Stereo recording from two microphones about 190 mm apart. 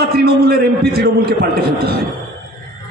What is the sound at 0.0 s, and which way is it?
A man's voice, 55° right (ahead or behind).